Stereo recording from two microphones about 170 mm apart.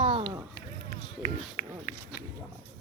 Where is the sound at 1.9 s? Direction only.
55° left (ahead or behind).